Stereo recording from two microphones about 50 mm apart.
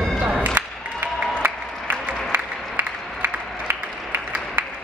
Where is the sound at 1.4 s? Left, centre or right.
Right.